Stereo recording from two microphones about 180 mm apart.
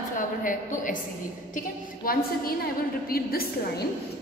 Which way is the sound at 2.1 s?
55° left (ahead or behind).